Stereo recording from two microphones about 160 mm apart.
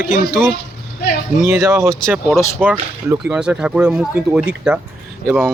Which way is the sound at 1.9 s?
5° left (ahead or behind).